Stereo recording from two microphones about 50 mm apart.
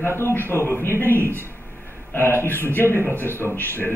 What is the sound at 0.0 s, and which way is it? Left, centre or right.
Speech, left.